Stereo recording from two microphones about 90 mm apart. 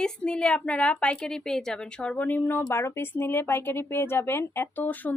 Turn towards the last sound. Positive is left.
turn(degrees=20)  # may be behind; listen again after turning